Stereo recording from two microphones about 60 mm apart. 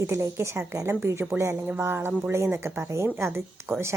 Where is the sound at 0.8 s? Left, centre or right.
Right.